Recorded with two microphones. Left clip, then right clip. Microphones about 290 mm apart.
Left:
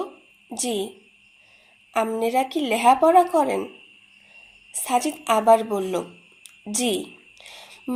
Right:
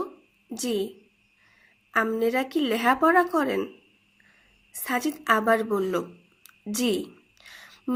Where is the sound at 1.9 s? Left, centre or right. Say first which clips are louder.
Left 1 dB; right.